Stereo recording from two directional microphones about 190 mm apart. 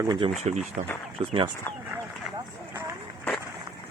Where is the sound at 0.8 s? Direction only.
35° right (ahead or behind).